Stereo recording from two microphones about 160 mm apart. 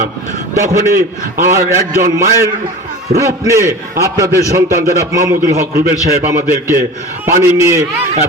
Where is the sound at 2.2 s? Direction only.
15° right (ahead or behind).